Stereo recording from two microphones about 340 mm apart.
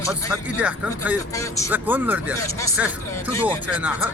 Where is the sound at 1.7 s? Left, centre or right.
Centre.